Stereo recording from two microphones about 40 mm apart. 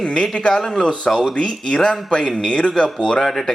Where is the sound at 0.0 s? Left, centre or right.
Left.